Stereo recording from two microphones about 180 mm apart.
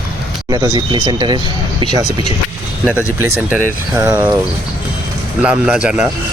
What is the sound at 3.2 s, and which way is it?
Speech, 15° right (ahead or behind).